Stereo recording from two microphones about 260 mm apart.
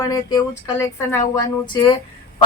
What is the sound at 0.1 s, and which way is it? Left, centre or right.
Speech, centre.